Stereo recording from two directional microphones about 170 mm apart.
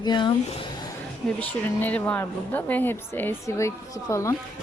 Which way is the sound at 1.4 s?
10° left (ahead or behind).